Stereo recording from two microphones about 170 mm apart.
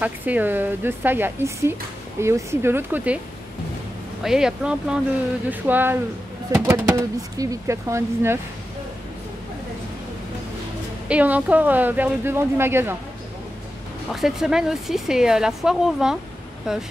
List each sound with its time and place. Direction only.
0.0 s speech: 10° right (ahead or behind)
4.2 s speech: 5° right (ahead or behind)
11.1 s speech: 10° right (ahead or behind)
14.1 s speech: 5° right (ahead or behind)